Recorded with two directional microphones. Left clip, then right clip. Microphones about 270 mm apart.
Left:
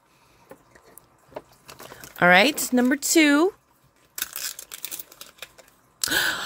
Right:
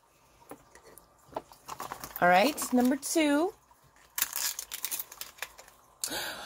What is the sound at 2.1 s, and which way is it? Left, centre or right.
Speech, left.